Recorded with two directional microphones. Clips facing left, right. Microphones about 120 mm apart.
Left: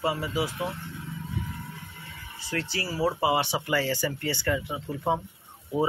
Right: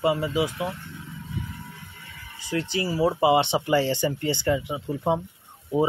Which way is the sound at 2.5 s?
15° right (ahead or behind).